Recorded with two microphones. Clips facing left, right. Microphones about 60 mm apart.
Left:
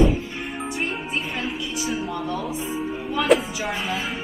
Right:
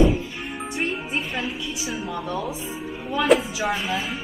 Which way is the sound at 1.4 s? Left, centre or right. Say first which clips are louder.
Left 1 dB; centre.